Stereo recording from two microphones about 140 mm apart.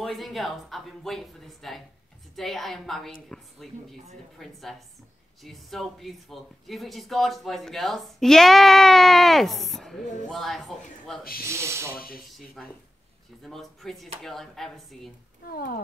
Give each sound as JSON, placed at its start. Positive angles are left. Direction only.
{"t": 0.0, "sound": "speech", "side_deg": 0}
{"t": 11.4, "sound": "speech", "side_deg": -20}
{"t": 12.0, "sound": "speech", "side_deg": 90}
{"t": 12.6, "sound": "speech", "side_deg": 0}
{"t": 15.4, "sound": "speech", "side_deg": 90}